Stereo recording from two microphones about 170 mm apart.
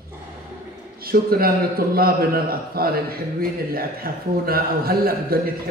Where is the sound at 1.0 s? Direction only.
60° right (ahead or behind).